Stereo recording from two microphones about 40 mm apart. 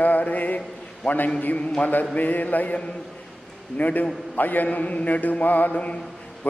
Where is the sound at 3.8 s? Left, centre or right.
Left.